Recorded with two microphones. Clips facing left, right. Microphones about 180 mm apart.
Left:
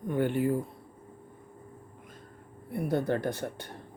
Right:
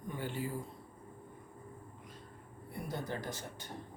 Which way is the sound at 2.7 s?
60° left (ahead or behind).